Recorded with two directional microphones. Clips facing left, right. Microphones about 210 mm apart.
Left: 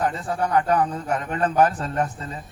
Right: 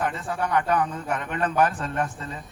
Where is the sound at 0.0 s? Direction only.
35° left (ahead or behind).